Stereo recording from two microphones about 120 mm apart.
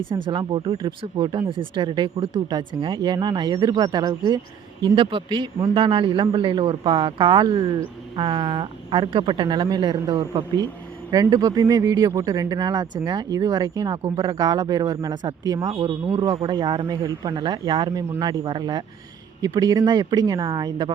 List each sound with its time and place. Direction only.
0.1 s a man's voice: 40° right (ahead or behind)